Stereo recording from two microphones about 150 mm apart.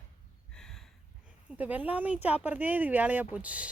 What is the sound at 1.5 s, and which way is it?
Speech, 10° right (ahead or behind).